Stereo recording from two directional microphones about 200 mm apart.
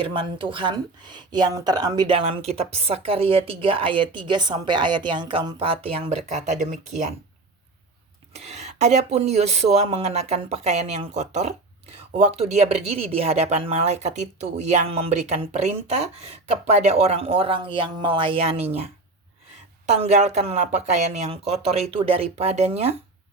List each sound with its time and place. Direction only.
0.0 s a woman's voice: 25° right (ahead or behind)
8.3 s speech: 35° right (ahead or behind)
20.0 s speech: 35° right (ahead or behind)